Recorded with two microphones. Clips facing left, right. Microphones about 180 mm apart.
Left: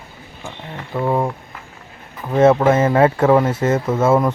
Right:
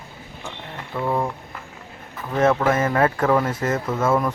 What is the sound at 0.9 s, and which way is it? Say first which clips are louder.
Speech: left 4 dB; 20° left (ahead or behind).